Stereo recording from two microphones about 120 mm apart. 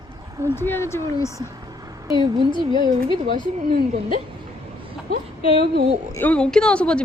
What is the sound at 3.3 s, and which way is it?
Speech, 90° right.